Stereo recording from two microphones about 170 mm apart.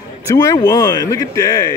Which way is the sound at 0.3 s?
20° left (ahead or behind).